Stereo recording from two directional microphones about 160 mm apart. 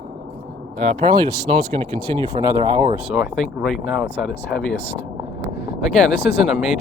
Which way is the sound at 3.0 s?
Centre (ahead or behind).